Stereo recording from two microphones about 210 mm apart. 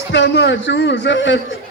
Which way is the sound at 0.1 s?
60° left (ahead or behind).